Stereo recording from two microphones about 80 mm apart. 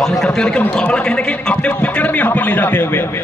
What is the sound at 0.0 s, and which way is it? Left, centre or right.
A man's voice, centre.